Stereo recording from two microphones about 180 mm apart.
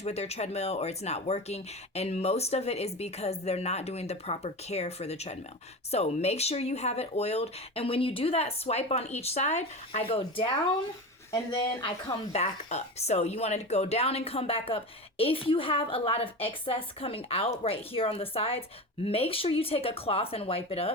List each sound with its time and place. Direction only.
0.0 s speech: 35° left (ahead or behind)